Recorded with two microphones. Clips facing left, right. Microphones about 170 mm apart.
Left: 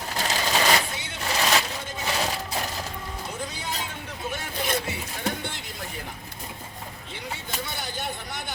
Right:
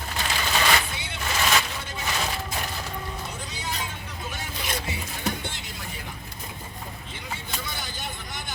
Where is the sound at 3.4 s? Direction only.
55° left (ahead or behind).